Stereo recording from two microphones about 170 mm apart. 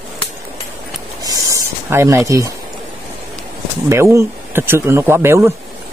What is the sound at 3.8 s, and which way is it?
Speech, 15° right (ahead or behind).